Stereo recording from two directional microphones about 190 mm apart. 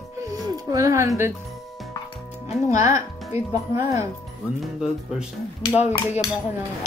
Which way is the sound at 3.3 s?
15° right (ahead or behind).